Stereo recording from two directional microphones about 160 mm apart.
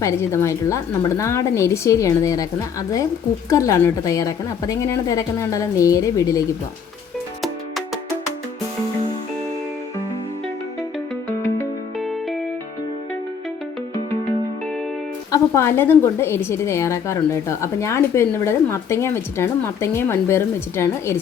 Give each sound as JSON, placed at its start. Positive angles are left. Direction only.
{"t": 0.0, "sound": "a woman's voice", "side_deg": 15}
{"t": 11.9, "sound": "music", "side_deg": 0}
{"t": 15.3, "sound": "a woman's voice", "side_deg": 15}